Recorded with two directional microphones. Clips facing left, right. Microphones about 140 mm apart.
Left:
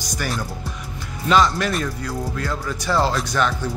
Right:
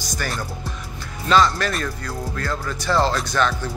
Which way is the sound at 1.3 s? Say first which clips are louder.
Even; 15° left (ahead or behind).